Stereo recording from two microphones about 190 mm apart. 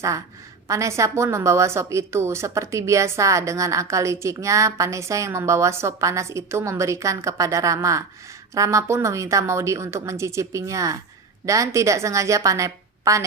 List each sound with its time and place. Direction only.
0.7 s a woman's voice: 15° right (ahead or behind)